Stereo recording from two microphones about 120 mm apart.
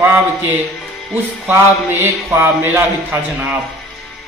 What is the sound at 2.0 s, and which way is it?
Speech, 20° right (ahead or behind).